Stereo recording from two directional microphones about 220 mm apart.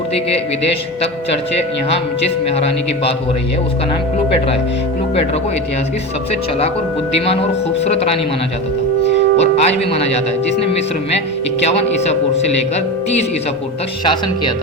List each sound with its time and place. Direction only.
0.1 s a man's voice: 25° left (ahead or behind)
1.9 s a man's voice: 25° left (ahead or behind)
7.9 s a man's voice: 25° left (ahead or behind)
9.4 s a man's voice: 30° left (ahead or behind)
14.0 s a man's voice: 20° left (ahead or behind)